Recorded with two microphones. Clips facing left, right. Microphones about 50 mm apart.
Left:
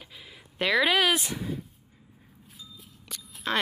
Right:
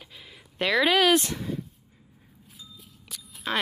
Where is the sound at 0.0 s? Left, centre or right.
Centre.